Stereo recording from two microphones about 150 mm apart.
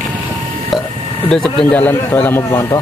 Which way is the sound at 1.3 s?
5° left (ahead or behind).